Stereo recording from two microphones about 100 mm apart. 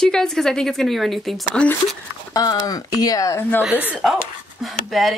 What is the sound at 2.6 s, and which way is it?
Speech, 40° left (ahead or behind).